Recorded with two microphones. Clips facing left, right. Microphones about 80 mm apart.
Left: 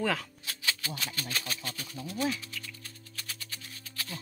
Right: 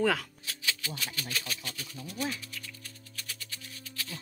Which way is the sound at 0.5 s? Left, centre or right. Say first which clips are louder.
Left 1 dB; left.